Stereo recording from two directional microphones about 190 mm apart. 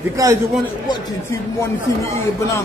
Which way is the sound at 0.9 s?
15° left (ahead or behind).